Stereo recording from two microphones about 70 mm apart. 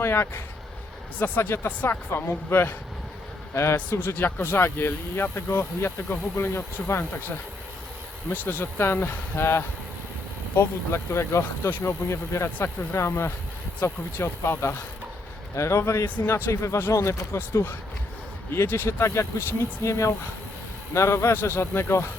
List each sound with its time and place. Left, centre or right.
0.0 s speech: left
16.0 s speech: left
16.3 s speech: left